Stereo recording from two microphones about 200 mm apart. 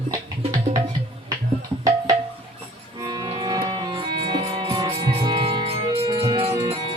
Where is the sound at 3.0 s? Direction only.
20° right (ahead or behind).